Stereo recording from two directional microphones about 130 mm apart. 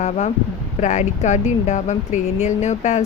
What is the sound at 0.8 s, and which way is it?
Speech, 65° left (ahead or behind).